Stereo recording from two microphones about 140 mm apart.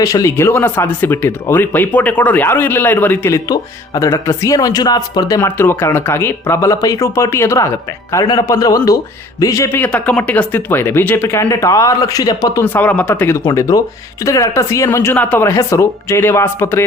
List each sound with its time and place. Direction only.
0.0 s speech: 25° left (ahead or behind)
12.6 s speech: 10° left (ahead or behind)